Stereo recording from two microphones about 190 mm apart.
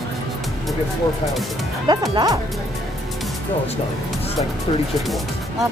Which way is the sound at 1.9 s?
20° right (ahead or behind).